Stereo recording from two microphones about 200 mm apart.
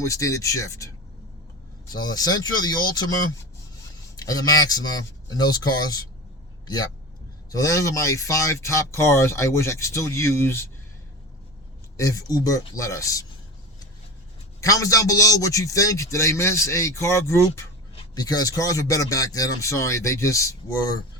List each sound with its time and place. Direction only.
0.0 s speech: 15° left (ahead or behind)
1.9 s speech: 20° left (ahead or behind)
4.2 s speech: 20° left (ahead or behind)
7.5 s speech: 15° left (ahead or behind)
11.9 s speech: 15° left (ahead or behind)
14.6 s speech: 15° left (ahead or behind)